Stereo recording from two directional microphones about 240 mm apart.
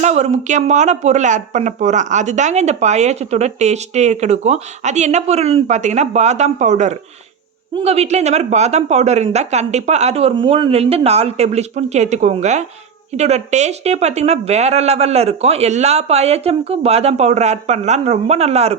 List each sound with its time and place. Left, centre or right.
0.0 s speech: right